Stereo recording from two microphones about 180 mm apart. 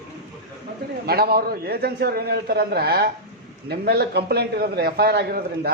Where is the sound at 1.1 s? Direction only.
60° right (ahead or behind).